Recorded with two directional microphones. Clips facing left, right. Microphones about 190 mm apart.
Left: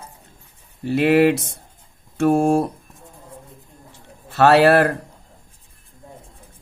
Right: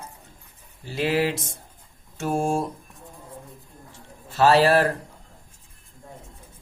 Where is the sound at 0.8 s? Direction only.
60° left (ahead or behind).